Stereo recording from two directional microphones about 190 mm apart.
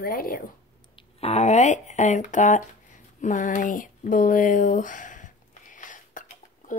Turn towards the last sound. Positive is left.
turn(degrees=45)  # may be behind; listen again after turning